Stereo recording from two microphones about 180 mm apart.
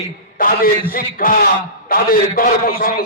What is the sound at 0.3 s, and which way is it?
Speech, 50° left (ahead or behind).